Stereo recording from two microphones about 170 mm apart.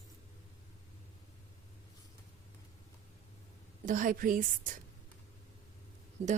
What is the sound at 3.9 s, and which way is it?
Speech, 50° right (ahead or behind).